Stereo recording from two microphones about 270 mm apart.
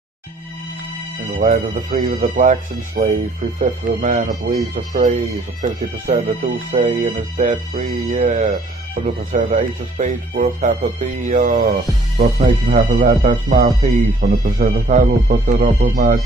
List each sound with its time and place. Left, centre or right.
1.3 s speech: right
12.7 s speech: right